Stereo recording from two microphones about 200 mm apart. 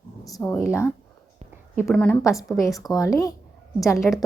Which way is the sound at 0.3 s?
15° left (ahead or behind).